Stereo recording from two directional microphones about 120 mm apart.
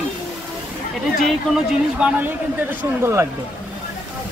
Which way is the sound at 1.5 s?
10° right (ahead or behind).